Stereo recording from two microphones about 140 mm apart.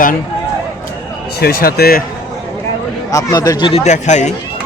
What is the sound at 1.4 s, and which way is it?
Speech, 90° left.